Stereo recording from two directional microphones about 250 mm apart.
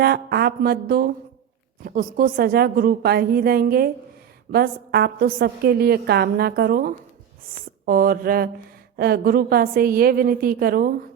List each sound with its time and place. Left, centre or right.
0.0 s a woman's voice: right